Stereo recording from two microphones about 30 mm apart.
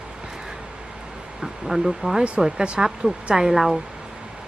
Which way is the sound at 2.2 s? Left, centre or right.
Right.